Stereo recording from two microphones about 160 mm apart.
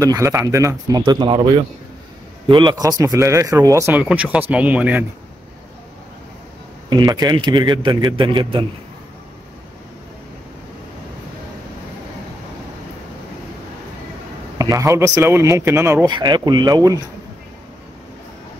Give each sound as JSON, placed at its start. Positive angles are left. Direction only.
{"t": 0.0, "sound": "a man's voice", "side_deg": -20}
{"t": 2.4, "sound": "speech", "side_deg": -30}
{"t": 6.9, "sound": "a man's voice", "side_deg": -25}
{"t": 14.6, "sound": "a man's voice", "side_deg": -20}